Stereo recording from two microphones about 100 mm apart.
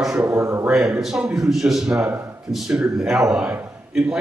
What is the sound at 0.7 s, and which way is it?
A man's voice, 5° right (ahead or behind).